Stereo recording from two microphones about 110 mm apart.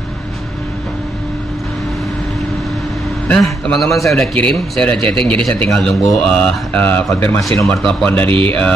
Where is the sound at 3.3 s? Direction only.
5° left (ahead or behind).